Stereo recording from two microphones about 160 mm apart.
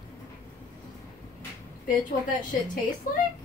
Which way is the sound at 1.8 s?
55° left (ahead or behind).